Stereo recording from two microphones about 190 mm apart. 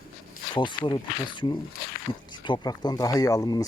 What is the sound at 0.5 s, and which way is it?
Speech, 25° left (ahead or behind).